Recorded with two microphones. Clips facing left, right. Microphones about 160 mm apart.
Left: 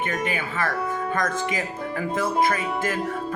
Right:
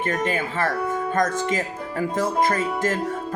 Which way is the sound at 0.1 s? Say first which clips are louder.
Right 3 dB; 40° right (ahead or behind).